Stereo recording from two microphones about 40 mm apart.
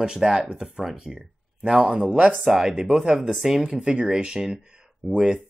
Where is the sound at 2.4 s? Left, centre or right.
Centre.